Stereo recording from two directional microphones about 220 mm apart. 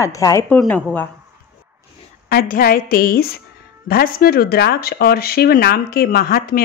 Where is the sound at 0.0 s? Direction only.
15° left (ahead or behind).